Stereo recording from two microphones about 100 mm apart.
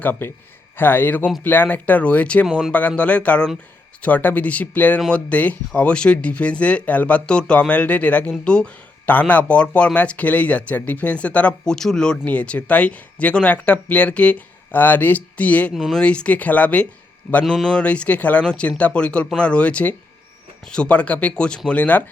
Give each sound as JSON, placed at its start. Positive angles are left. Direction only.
{"t": 0.0, "sound": "speech", "side_deg": 20}
{"t": 15.7, "sound": "speech", "side_deg": 0}
{"t": 16.0, "sound": "speech", "side_deg": 10}
{"t": 17.4, "sound": "speech", "side_deg": 5}